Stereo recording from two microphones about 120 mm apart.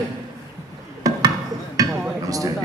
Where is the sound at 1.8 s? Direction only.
30° right (ahead or behind).